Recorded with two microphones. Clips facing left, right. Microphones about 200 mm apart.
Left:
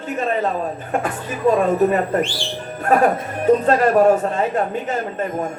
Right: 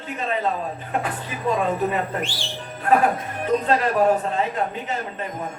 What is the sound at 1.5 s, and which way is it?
A man's voice, 45° left (ahead or behind).